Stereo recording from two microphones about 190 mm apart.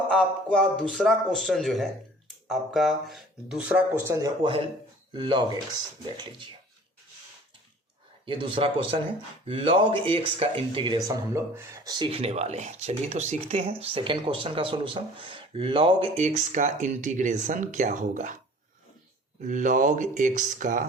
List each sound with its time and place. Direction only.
0.1 s speech: 5° left (ahead or behind)
4.0 s speech: 15° right (ahead or behind)
8.2 s speech: 25° right (ahead or behind)
11.3 s speech: 15° right (ahead or behind); by 18.3 s 40° right (ahead or behind)
19.4 s speech: 40° right (ahead or behind)